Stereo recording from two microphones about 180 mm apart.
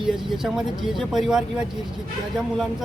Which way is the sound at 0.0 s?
Centre (ahead or behind).